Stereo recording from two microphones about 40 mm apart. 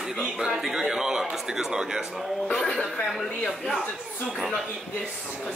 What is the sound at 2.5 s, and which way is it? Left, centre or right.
Speech, centre.